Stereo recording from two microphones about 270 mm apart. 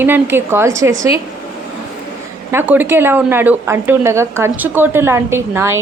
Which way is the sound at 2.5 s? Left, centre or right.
Centre.